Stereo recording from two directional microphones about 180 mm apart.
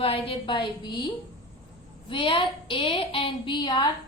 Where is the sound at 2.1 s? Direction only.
25° left (ahead or behind).